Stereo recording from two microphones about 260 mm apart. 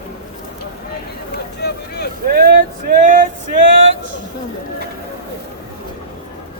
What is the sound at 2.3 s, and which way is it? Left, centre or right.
Speech, right.